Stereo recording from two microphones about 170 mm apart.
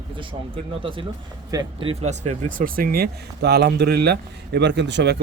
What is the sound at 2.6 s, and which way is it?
Speech, 55° right (ahead or behind).